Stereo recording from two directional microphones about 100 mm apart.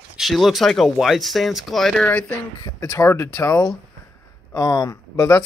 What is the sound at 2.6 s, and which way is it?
Speech, 40° left (ahead or behind).